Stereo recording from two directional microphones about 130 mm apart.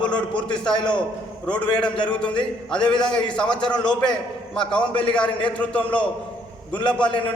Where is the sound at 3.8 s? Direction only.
5° left (ahead or behind).